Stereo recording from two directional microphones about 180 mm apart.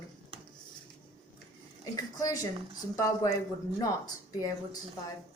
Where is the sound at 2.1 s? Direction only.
20° left (ahead or behind).